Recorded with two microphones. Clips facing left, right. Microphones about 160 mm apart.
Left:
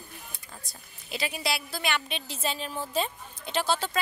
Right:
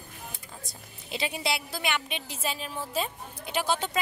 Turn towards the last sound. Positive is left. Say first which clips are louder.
# left 1 dB
turn(degrees=-15)  # may be behind; listen again after turning